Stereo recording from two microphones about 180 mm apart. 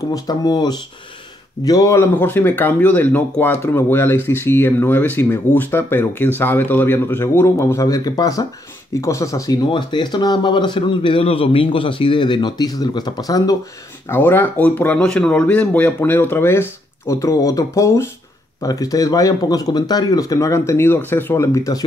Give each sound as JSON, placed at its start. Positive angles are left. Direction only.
{"t": 0.1, "sound": "speech", "side_deg": 20}